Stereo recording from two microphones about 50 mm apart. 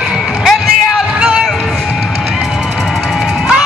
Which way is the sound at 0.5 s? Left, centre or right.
Centre.